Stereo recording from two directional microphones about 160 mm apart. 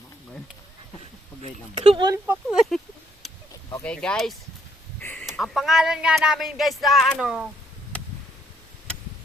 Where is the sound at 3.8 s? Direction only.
5° left (ahead or behind).